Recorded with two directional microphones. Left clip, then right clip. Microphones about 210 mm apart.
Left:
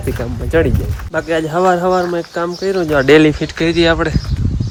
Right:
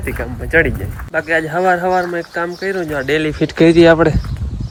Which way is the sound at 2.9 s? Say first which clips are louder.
Left 10 dB; 30° left (ahead or behind).